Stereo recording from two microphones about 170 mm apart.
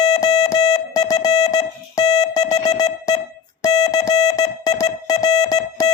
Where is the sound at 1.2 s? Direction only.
25° left (ahead or behind).